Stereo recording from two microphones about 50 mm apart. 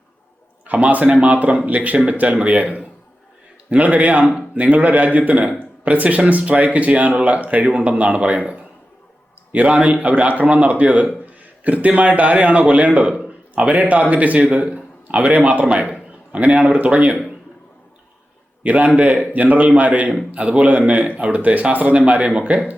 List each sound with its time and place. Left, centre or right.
0.7 s a man's voice: right
18.6 s a man's voice: right